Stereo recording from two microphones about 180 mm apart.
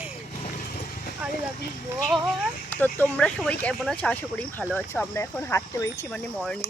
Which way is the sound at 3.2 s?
5° left (ahead or behind).